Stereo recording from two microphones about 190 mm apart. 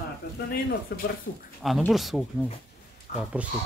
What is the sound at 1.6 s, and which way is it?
Speech, centre (ahead or behind).